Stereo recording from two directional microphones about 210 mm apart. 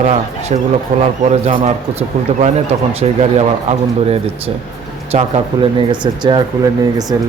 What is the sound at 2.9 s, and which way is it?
Speech, 30° right (ahead or behind).